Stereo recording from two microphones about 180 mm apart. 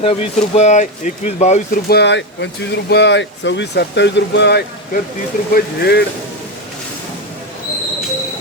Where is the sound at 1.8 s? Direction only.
65° left (ahead or behind).